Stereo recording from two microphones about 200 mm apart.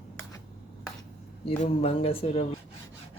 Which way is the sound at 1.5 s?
30° left (ahead or behind).